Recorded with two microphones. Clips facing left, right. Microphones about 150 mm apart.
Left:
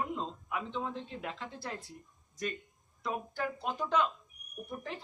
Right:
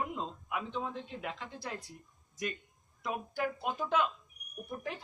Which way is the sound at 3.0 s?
10° right (ahead or behind).